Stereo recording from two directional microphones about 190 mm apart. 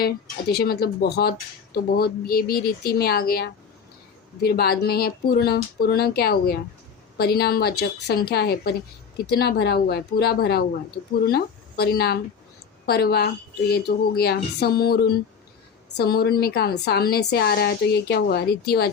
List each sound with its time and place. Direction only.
0.0 s a woman's voice: 55° left (ahead or behind)